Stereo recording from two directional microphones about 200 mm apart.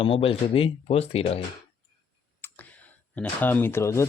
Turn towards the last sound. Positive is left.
turn(degrees=15)  # may be behind; listen again after turning